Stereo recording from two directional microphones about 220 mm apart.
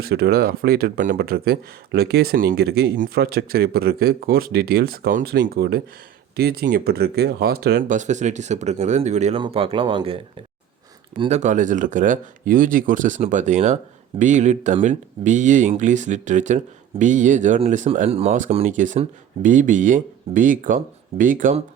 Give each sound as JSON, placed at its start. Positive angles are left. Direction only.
{"t": 0.0, "sound": "speech", "side_deg": -45}
{"t": 11.2, "sound": "speech", "side_deg": -30}